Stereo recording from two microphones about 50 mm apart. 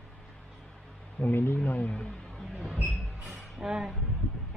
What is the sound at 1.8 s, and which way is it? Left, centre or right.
Music, centre.